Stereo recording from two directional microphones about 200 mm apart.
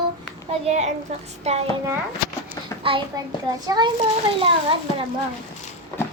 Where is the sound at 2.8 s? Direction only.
25° right (ahead or behind).